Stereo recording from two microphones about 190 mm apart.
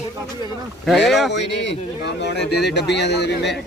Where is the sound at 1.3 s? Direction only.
65° left (ahead or behind).